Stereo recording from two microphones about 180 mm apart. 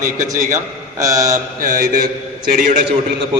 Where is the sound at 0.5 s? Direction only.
15° right (ahead or behind).